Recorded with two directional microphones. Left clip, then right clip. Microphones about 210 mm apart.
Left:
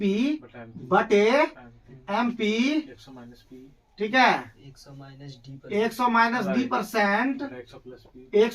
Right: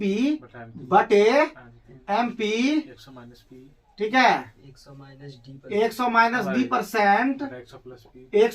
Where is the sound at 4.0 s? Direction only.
5° left (ahead or behind).